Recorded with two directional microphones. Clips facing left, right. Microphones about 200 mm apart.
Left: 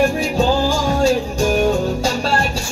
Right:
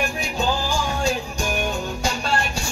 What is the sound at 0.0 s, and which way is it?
Music, 30° left (ahead or behind).